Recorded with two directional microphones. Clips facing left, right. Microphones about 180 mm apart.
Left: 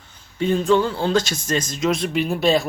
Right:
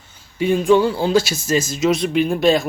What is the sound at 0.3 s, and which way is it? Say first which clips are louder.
Speech: right 3 dB; 10° right (ahead or behind).